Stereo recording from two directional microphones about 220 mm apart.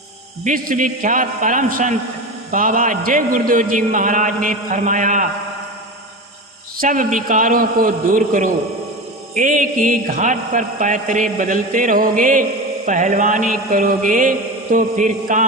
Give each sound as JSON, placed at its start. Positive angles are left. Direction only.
{"t": 0.4, "sound": "a man's voice", "side_deg": -40}
{"t": 6.7, "sound": "a man's voice", "side_deg": -35}